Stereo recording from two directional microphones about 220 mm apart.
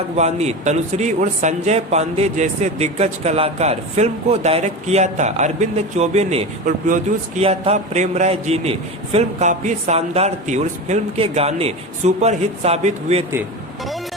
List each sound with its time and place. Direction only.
0.2 s speech: 30° right (ahead or behind)